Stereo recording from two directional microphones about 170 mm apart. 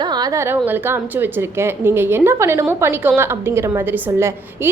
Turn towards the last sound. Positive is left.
turn(degrees=-15)  # may be behind; listen again after turning